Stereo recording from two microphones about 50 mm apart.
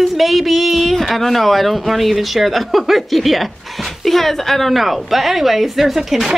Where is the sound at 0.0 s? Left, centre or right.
Centre.